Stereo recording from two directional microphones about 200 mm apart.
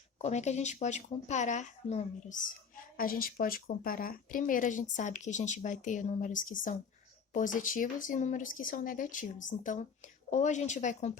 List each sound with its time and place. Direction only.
0.2 s speech: 35° left (ahead or behind)